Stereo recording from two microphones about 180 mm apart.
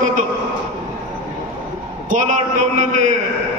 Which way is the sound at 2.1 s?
45° right (ahead or behind).